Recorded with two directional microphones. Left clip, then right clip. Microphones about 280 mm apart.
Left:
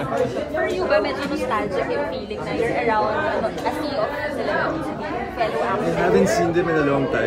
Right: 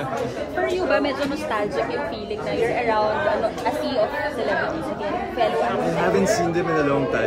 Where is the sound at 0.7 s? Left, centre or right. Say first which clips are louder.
Even; right.